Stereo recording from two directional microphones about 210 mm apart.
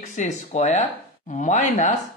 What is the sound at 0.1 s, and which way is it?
Speech, 35° left (ahead or behind).